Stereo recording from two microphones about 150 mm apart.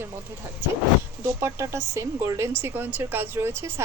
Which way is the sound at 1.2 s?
20° right (ahead or behind).